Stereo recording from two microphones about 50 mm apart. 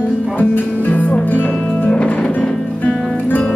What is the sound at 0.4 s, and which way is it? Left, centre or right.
Music, left.